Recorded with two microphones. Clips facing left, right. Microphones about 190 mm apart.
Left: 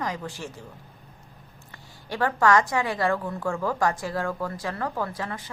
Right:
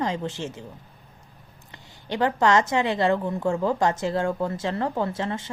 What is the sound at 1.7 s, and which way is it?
A woman's voice, 20° right (ahead or behind).